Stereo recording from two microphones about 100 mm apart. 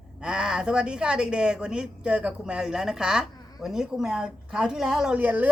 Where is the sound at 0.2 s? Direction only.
10° right (ahead or behind).